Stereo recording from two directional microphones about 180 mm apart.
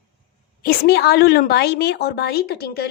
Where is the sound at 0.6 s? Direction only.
60° left (ahead or behind).